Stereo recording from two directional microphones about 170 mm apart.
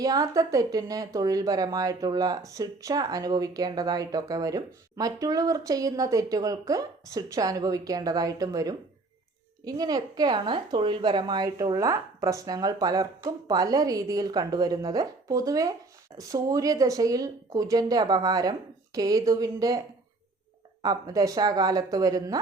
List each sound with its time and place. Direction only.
0.0 s speech: 20° right (ahead or behind)
20.8 s speech: 20° right (ahead or behind)